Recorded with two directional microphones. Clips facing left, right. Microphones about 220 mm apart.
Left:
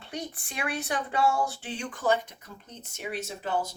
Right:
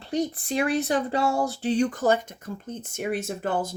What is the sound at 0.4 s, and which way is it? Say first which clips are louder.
Speech: right 9 dB; 40° right (ahead or behind).